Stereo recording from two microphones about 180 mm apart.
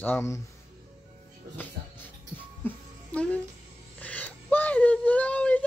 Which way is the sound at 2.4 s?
10° left (ahead or behind).